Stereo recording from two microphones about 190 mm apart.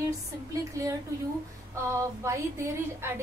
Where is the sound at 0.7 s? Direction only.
15° right (ahead or behind).